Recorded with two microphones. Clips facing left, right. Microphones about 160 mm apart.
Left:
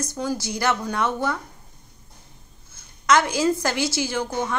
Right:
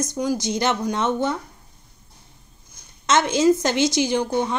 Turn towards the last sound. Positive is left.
turn(degrees=-20)  # may be behind; listen again after turning